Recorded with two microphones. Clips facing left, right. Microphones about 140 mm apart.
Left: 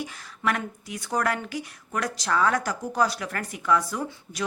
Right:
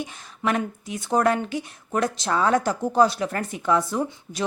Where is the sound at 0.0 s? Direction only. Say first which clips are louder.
Right 2 dB; 20° right (ahead or behind).